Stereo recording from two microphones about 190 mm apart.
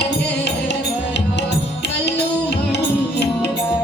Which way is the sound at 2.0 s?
65° left (ahead or behind).